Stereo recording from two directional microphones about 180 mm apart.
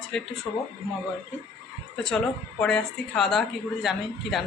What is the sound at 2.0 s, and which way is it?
A woman's voice, 5° left (ahead or behind).